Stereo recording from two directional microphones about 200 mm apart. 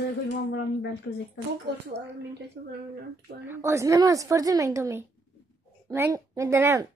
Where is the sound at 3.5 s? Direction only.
15° right (ahead or behind).